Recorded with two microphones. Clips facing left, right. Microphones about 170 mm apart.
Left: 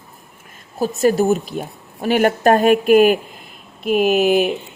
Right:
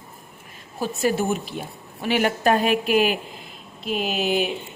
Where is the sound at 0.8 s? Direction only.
40° left (ahead or behind).